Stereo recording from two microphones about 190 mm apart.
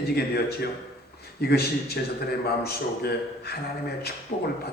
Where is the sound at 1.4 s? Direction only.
55° left (ahead or behind).